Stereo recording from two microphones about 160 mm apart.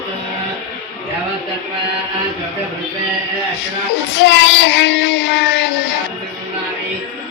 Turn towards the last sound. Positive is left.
turn(degrees=90)